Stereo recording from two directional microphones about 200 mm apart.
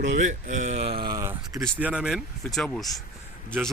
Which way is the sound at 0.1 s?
40° right (ahead or behind).